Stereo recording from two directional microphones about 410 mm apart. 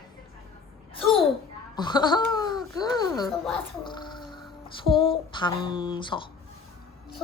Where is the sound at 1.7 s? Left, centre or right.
Centre.